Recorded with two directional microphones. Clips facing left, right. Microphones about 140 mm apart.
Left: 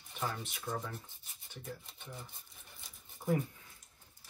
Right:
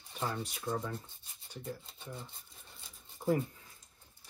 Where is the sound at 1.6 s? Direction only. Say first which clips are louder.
Right 3 dB; 25° right (ahead or behind).